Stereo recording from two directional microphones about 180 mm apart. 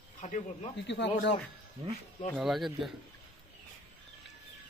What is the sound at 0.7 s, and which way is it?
Speech, 80° left.